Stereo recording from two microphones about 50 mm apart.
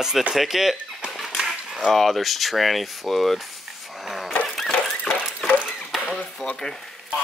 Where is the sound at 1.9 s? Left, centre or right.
Centre.